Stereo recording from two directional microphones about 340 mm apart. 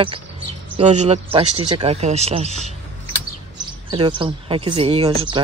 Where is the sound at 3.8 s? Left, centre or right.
Centre.